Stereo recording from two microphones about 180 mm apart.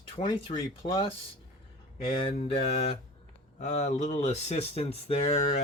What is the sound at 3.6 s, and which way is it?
Speech, 40° left (ahead or behind).